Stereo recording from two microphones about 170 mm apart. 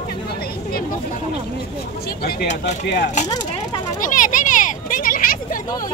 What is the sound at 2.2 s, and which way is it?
Speech, 65° left (ahead or behind).